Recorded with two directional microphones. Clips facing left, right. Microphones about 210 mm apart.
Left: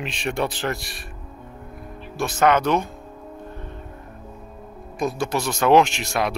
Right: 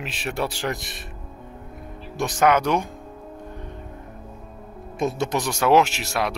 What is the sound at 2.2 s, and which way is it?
Speech, 15° right (ahead or behind).